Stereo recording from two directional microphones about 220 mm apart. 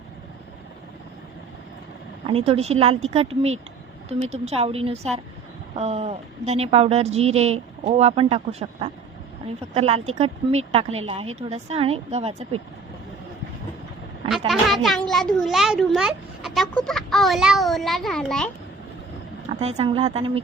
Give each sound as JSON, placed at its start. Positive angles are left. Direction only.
{"t": 2.2, "sound": "speech", "side_deg": -25}
{"t": 14.3, "sound": "a child's voice", "side_deg": 0}
{"t": 19.5, "sound": "speech", "side_deg": -30}